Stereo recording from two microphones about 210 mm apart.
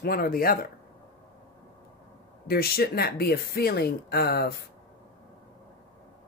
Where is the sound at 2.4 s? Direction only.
45° left (ahead or behind).